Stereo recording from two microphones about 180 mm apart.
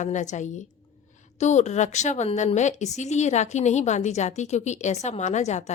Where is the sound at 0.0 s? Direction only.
45° left (ahead or behind).